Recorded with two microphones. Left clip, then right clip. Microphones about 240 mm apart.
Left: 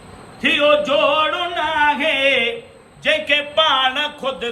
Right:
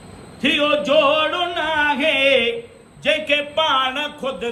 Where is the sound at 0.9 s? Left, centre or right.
Centre.